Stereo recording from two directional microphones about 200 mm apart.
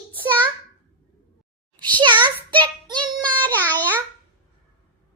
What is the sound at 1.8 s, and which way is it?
Child singing, 25° right (ahead or behind).